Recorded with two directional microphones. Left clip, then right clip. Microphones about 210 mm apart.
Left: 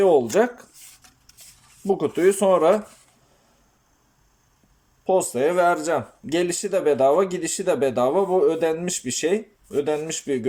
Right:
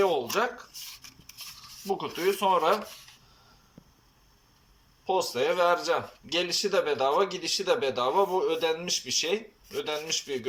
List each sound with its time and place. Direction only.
0.0 s speech: 40° left (ahead or behind)
2.0 s speech: 35° left (ahead or behind)
5.0 s speech: 40° left (ahead or behind)